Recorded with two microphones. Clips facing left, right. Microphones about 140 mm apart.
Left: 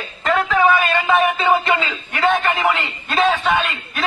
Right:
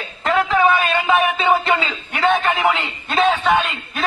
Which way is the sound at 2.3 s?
15° right (ahead or behind).